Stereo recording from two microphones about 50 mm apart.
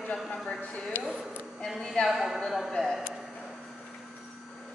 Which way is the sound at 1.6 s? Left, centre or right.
Centre.